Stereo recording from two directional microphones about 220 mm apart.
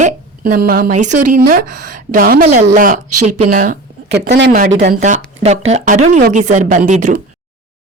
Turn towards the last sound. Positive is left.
turn(degrees=-35)  # may be behind; listen again after turning